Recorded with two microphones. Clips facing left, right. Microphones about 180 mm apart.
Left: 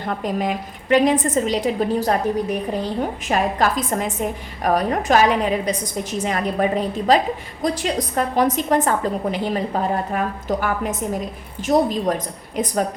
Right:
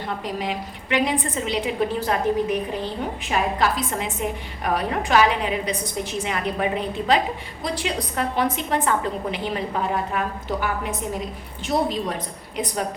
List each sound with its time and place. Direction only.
0.2 s a woman's voice: 50° left (ahead or behind)